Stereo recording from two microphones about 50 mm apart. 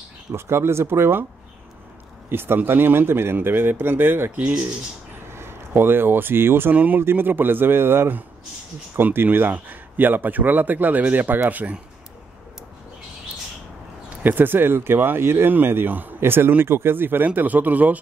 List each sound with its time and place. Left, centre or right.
0.3 s speech: right
2.2 s speech: right
5.3 s speech: right
6.7 s speech: right
7.0 s speech: right
14.2 s speech: right
15.5 s speech: right
16.2 s speech: right
17.4 s speech: right